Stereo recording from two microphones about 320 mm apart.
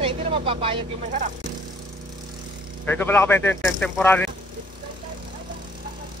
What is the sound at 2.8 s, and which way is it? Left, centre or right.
Speech, centre.